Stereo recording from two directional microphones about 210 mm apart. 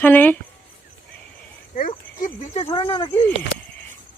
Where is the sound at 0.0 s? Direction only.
10° left (ahead or behind).